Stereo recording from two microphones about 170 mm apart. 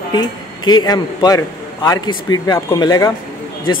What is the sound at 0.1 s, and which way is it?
Speech, 25° left (ahead or behind).